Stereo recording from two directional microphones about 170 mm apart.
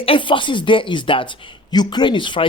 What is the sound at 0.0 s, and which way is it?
Speech, 30° left (ahead or behind).